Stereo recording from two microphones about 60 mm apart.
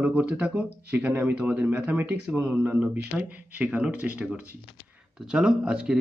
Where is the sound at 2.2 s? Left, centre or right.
Right.